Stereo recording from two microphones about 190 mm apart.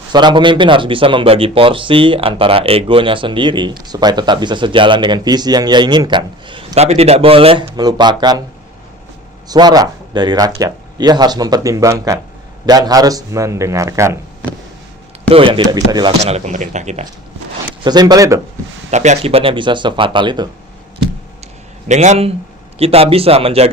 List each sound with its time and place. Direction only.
0.1 s speech: 25° right (ahead or behind)
9.5 s speech: 20° right (ahead or behind)
15.3 s speech: 30° right (ahead or behind)
16.2 s speech: 35° right (ahead or behind)
17.8 s speech: 20° right (ahead or behind)
18.9 s speech: 35° right (ahead or behind)
21.8 s speech: 35° right (ahead or behind)